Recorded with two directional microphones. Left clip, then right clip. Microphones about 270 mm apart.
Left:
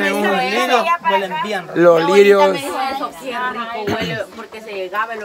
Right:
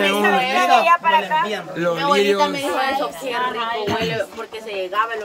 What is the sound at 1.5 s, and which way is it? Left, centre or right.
Speech, centre.